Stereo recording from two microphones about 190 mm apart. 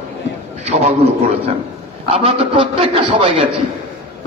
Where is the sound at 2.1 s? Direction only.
30° right (ahead or behind).